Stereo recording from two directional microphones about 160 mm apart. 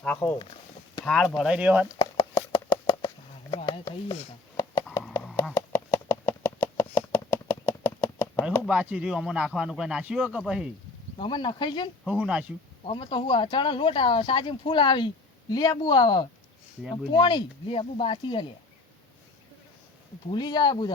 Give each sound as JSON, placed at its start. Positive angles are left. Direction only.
{"t": 0.0, "sound": "speech", "side_deg": 10}
{"t": 2.0, "sound": "clip-clop", "side_deg": 25}
{"t": 3.5, "sound": "chopping", "side_deg": 30}
{"t": 5.5, "sound": "a sound", "side_deg": 15}
{"t": 8.7, "sound": "speech", "side_deg": -10}
{"t": 11.2, "sound": "speech", "side_deg": 30}
{"t": 12.0, "sound": "speech", "side_deg": -5}
{"t": 12.8, "sound": "speech", "side_deg": 30}
{"t": 20.3, "sound": "speech", "side_deg": 25}